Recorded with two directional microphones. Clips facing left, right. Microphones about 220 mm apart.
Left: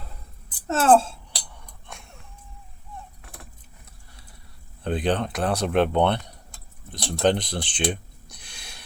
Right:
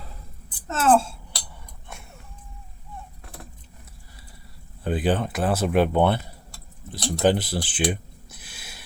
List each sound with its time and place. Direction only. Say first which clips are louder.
0.7 s speech: left 2 dB; 30° left (ahead or behind)
1.9 s a sound: right 1 dB; 5° right (ahead or behind)
4.8 s speech: right 1 dB; 5° right (ahead or behind)